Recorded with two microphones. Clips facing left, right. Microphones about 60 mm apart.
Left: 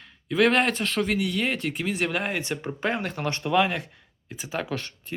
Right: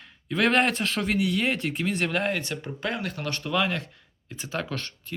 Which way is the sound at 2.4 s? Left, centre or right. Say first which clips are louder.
Left 3 dB; left.